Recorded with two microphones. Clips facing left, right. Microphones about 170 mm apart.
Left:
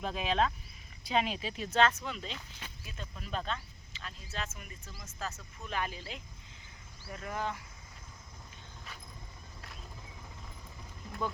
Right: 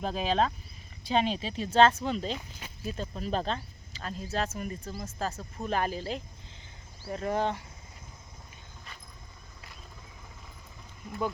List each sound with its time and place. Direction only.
0.0 s speech: 35° right (ahead or behind)